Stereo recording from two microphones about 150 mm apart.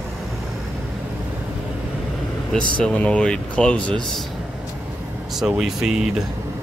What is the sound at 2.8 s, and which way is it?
Speech, 5° left (ahead or behind).